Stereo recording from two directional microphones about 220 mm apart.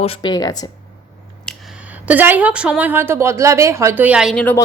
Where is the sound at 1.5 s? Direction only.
5° right (ahead or behind).